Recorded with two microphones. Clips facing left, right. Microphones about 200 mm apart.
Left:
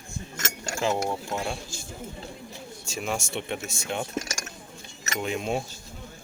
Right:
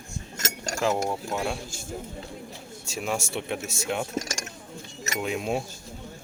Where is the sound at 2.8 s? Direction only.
Centre (ahead or behind).